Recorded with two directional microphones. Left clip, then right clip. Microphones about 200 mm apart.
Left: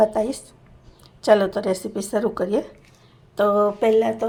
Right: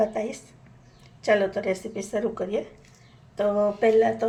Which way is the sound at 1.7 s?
40° left (ahead or behind).